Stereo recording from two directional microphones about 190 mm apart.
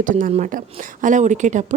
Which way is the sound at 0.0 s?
45° right (ahead or behind).